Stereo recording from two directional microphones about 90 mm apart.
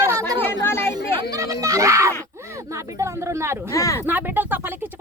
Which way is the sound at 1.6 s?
35° right (ahead or behind).